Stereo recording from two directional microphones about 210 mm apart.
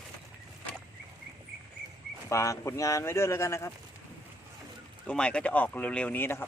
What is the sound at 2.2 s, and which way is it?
Speech, 15° left (ahead or behind).